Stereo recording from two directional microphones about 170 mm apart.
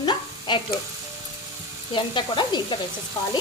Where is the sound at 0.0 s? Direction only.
30° left (ahead or behind).